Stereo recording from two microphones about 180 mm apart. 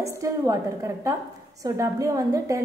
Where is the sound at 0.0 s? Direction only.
15° right (ahead or behind).